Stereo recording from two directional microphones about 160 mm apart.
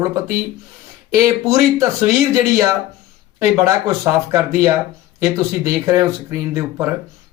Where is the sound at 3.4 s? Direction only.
20° right (ahead or behind).